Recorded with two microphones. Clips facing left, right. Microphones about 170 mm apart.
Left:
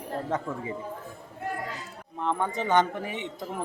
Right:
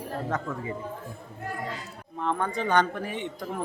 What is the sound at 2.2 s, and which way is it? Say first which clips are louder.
Speech: even; 20° left (ahead or behind).